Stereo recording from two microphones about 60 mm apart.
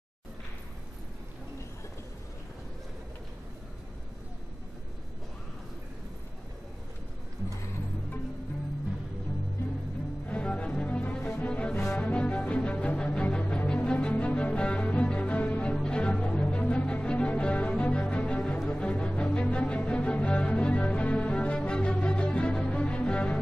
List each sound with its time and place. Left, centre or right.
10.2 s music: left